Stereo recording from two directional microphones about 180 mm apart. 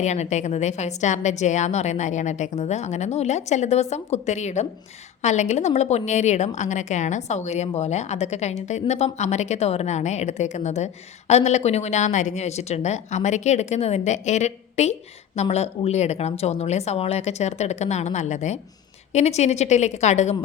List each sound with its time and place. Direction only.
0.0 s a woman's voice: 40° left (ahead or behind)